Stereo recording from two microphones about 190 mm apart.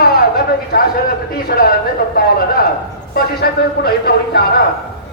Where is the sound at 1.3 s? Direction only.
55° left (ahead or behind).